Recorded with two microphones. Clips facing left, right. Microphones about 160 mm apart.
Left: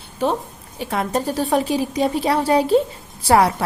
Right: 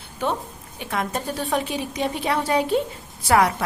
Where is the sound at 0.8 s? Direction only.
35° left (ahead or behind).